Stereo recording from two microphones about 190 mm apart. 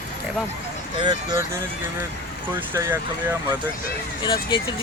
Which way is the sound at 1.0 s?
20° right (ahead or behind).